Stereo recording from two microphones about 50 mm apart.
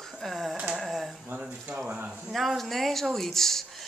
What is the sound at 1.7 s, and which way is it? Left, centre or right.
Speech, right.